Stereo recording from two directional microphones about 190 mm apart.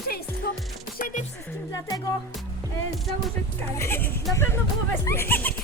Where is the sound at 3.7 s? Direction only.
15° left (ahead or behind).